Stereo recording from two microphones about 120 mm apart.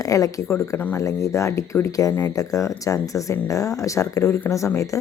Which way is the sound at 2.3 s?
30° left (ahead or behind).